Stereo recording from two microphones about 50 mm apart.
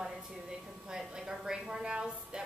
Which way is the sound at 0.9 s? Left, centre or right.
Centre.